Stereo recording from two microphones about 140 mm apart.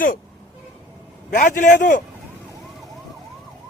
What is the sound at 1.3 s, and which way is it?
Speech, 75° left (ahead or behind).